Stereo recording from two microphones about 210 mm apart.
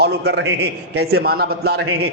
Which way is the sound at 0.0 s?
55° right (ahead or behind).